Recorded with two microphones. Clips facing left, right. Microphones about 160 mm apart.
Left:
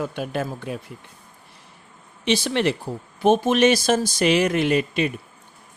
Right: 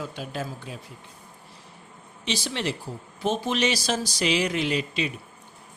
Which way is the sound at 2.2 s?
55° left (ahead or behind).